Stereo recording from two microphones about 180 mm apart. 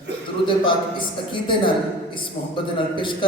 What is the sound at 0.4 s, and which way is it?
Speech, 25° left (ahead or behind).